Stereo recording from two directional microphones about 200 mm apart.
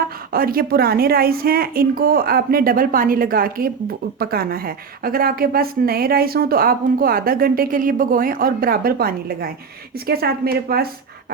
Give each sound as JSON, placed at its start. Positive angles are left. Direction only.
{"t": 0.0, "sound": "a woman's voice", "side_deg": -45}